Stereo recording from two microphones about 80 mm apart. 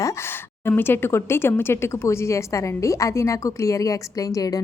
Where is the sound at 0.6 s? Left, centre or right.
Left.